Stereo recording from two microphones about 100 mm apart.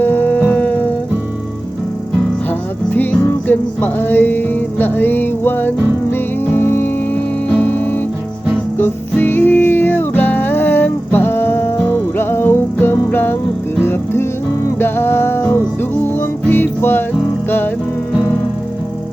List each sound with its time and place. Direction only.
0.0 s howl: 20° left (ahead or behind)
2.5 s music: 20° left (ahead or behind)